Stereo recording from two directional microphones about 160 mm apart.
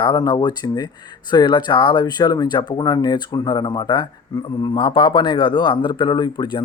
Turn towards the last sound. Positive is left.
turn(degrees=25)  # may be behind; listen again after turning